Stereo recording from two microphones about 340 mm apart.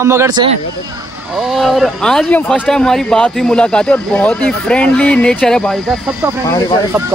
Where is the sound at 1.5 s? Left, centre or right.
Centre.